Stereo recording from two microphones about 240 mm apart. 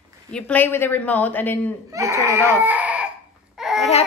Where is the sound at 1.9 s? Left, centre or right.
Centre.